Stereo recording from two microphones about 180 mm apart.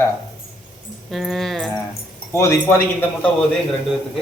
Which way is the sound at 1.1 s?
Centre (ahead or behind).